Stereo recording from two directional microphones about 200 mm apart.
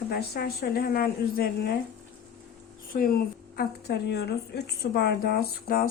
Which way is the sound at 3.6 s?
55° left (ahead or behind).